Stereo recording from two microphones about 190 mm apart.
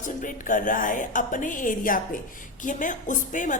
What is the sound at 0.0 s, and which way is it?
A woman's voice, 45° left (ahead or behind).